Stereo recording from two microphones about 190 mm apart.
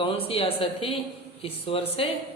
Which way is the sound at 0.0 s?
30° left (ahead or behind).